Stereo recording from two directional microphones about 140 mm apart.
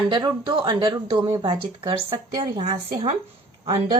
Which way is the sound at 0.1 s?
35° right (ahead or behind).